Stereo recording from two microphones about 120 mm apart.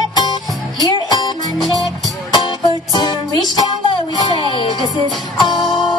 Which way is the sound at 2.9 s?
35° left (ahead or behind).